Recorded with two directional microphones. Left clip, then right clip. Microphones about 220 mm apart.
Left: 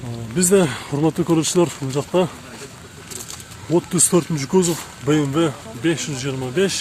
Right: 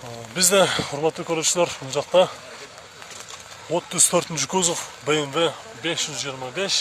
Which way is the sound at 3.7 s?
5° right (ahead or behind).